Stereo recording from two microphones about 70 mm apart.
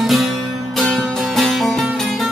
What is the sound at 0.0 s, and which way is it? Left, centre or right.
Music, centre.